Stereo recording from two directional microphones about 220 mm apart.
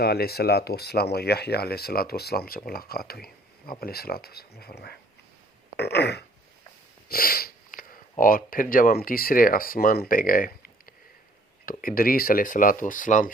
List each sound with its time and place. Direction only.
0.0 s speech: 45° left (ahead or behind)